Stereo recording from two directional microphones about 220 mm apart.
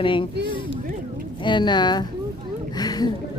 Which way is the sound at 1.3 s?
20° left (ahead or behind).